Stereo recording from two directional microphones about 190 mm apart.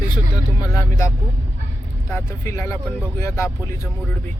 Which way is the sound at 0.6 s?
15° left (ahead or behind).